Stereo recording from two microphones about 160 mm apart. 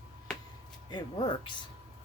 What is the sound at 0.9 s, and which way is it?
Speech, 25° left (ahead or behind).